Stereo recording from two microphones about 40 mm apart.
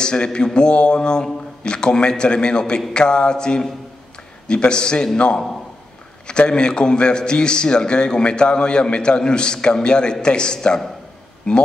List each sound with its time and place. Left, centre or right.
0.0 s a man's voice: left